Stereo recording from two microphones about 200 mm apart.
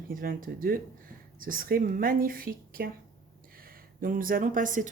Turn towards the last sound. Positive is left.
turn(degrees=-40)  # may be behind; listen again after turning